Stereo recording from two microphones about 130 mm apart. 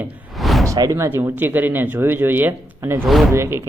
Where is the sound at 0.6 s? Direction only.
25° right (ahead or behind).